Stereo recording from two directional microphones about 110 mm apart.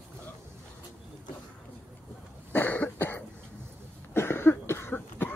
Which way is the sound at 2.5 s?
15° left (ahead or behind).